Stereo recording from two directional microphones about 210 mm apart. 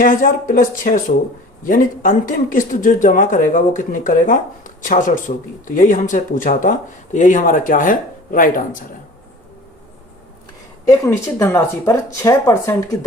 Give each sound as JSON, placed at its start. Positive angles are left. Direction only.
{"t": 0.0, "sound": "speech", "side_deg": 40}
{"t": 10.8, "sound": "speech", "side_deg": 15}